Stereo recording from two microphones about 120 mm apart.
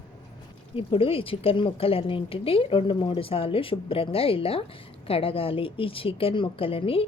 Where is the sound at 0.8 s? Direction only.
50° left (ahead or behind).